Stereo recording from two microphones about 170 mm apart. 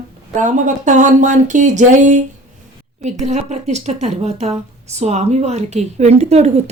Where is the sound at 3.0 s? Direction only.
45° right (ahead or behind).